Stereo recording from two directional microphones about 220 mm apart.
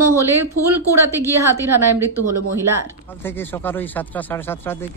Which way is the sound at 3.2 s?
10° left (ahead or behind).